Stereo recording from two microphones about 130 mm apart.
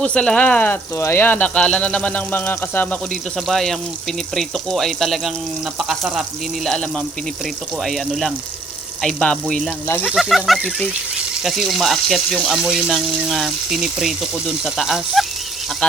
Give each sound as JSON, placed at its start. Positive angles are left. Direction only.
{"t": 0.0, "sound": "speech", "side_deg": 5}
{"t": 3.3, "sound": "speech", "side_deg": 0}
{"t": 6.7, "sound": "speech", "side_deg": 5}
{"t": 9.8, "sound": "speech", "side_deg": 15}
{"t": 10.1, "sound": "speech", "side_deg": 0}